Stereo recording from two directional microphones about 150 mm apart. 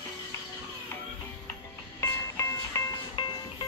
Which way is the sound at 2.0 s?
20° left (ahead or behind).